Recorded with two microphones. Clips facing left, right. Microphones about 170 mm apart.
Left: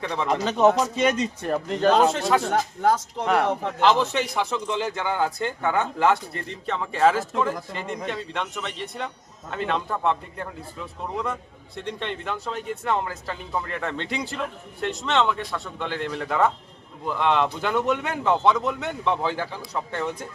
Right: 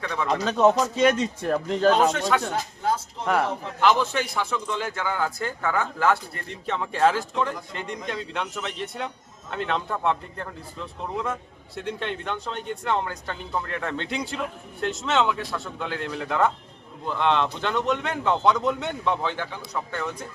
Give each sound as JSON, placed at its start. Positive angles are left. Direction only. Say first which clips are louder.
{"t": 0.0, "sound": "speech", "louder": "left 1 dB", "side_deg": 30}
{"t": 0.6, "sound": "a man's voice", "louder": "right 1 dB", "side_deg": 0}
{"t": 2.5, "sound": "speech", "louder": "left 5 dB", "side_deg": 75}
{"t": 3.8, "sound": "speech", "louder": "even", "side_deg": 25}
{"t": 6.5, "sound": "a man's voice", "louder": "right 1 dB", "side_deg": 0}
{"t": 19.7, "sound": "speech", "louder": "left 2 dB", "side_deg": 25}